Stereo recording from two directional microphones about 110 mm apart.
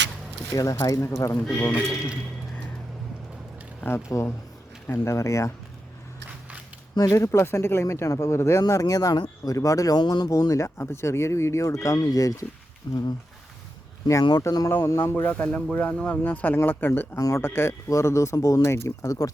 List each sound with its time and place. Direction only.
0.5 s a man's voice: 35° left (ahead or behind)
1.7 s speech: 10° right (ahead or behind)
3.8 s speech: 25° left (ahead or behind)
6.9 s a man's voice: 35° left (ahead or behind)
14.1 s a man's voice: 35° left (ahead or behind)
15.1 s speech: 15° left (ahead or behind)
17.2 s speech: 30° left (ahead or behind)